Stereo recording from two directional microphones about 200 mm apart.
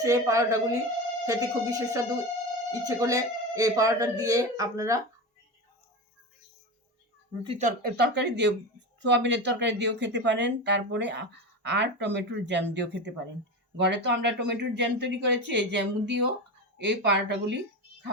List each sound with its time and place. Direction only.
0.0 s speech: 15° right (ahead or behind)
7.4 s speech: 30° right (ahead or behind)
7.8 s speech: 50° right (ahead or behind)